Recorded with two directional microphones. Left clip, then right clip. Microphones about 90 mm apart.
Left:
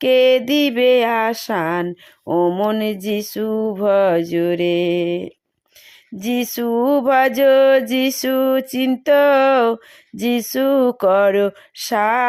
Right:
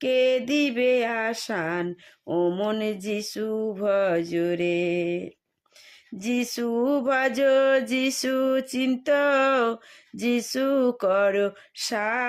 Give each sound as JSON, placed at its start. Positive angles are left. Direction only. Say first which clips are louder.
{"t": 0.0, "sound": "music", "louder": "left 9 dB", "side_deg": 70}
{"t": 2.3, "sound": "mantra", "louder": "left 8 dB", "side_deg": 35}
{"t": 2.8, "sound": "music", "louder": "left 6 dB", "side_deg": 60}
{"t": 6.7, "sound": "music", "louder": "left 8 dB", "side_deg": 45}